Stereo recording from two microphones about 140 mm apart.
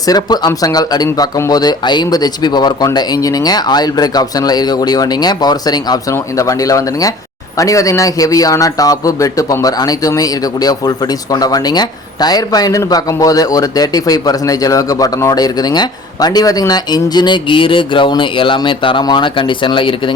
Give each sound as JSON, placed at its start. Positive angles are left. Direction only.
{"t": 0.0, "sound": "a man's voice", "side_deg": 30}